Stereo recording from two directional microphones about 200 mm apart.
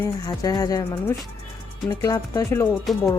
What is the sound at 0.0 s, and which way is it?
Speech, 20° left (ahead or behind).